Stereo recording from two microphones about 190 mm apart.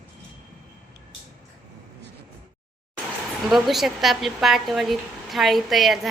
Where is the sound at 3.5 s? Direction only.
Centre (ahead or behind).